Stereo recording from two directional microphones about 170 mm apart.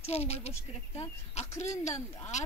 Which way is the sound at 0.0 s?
35° left (ahead or behind).